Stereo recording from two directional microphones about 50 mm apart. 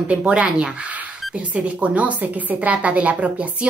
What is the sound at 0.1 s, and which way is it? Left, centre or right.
A woman's voice, right.